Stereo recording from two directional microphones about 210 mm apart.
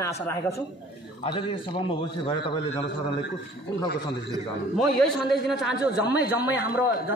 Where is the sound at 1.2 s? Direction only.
25° left (ahead or behind).